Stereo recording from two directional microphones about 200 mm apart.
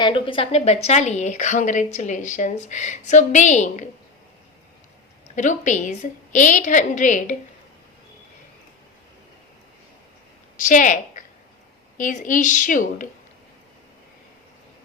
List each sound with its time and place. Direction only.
0.0 s a woman's voice: 25° left (ahead or behind)
5.3 s a woman's voice: 35° left (ahead or behind)
10.6 s a woman's voice: 40° left (ahead or behind)